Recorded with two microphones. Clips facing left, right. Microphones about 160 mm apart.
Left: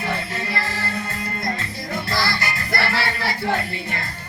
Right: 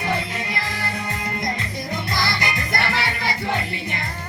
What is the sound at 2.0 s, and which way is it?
Music, 20° right (ahead or behind).